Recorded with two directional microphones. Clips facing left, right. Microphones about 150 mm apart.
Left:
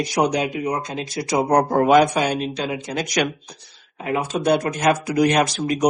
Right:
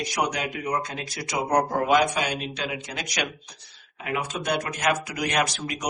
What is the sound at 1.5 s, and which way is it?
Speech, 50° left (ahead or behind).